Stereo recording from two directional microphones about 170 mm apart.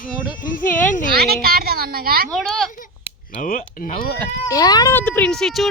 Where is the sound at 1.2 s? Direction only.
65° right (ahead or behind).